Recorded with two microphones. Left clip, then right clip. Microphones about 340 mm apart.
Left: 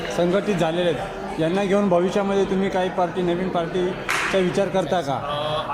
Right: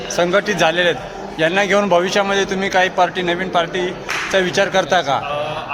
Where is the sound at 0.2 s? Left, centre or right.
Right.